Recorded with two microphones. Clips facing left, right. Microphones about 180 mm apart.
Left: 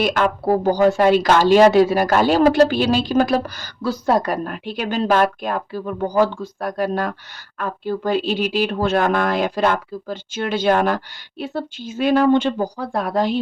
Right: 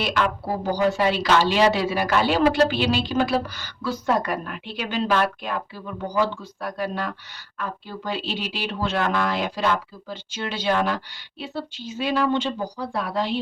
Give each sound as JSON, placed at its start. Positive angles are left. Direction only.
{"t": 0.0, "sound": "speech", "side_deg": 50}